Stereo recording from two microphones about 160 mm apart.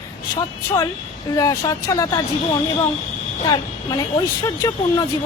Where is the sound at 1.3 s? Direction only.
20° left (ahead or behind).